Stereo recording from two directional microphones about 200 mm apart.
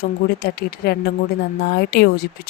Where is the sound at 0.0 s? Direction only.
50° left (ahead or behind).